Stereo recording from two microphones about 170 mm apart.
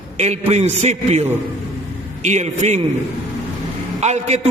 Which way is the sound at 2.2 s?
45° right (ahead or behind).